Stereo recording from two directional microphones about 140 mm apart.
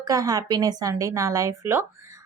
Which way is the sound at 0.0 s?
25° right (ahead or behind).